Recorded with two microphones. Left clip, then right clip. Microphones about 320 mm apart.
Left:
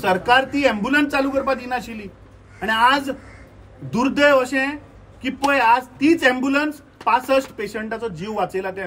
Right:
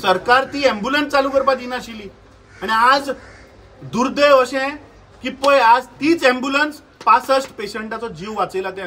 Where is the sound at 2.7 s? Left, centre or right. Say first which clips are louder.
Right 3 dB; centre.